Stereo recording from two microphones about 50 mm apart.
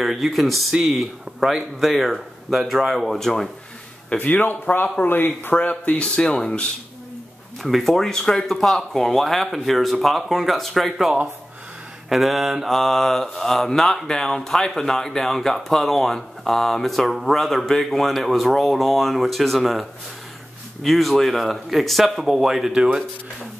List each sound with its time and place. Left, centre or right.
0.0 s speech: centre
4.2 s speech: left
5.6 s speech: left
7.6 s speech: centre
22.7 s speech: centre